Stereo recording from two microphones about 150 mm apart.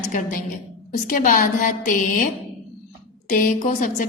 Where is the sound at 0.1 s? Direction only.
60° left (ahead or behind).